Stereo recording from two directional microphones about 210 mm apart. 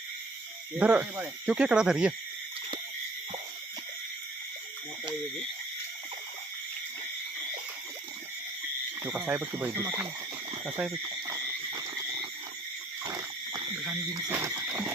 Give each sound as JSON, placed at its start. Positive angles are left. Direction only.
{"t": 0.8, "sound": "speech", "side_deg": -10}
{"t": 9.0, "sound": "speech", "side_deg": -10}
{"t": 11.0, "sound": "wild animals", "side_deg": -20}
{"t": 13.1, "sound": "a sound", "side_deg": -20}
{"t": 14.1, "sound": "speech", "side_deg": -15}